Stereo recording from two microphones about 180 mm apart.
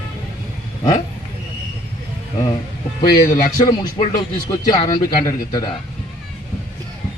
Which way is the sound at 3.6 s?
25° left (ahead or behind).